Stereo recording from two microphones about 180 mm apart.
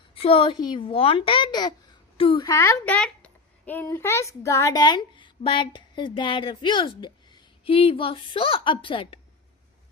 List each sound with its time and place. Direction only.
0.1 s a child's voice: 30° left (ahead or behind)